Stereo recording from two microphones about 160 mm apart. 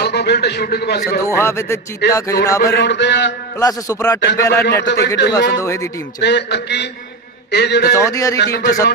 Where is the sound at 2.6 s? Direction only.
90° left.